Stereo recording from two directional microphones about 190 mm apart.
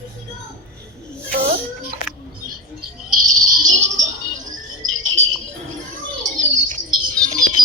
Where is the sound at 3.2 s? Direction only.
45° right (ahead or behind).